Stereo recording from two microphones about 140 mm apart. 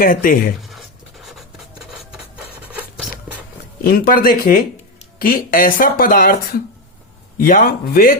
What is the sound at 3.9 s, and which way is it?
Speech, 90° left.